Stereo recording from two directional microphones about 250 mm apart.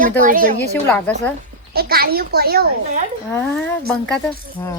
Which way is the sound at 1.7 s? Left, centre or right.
Right.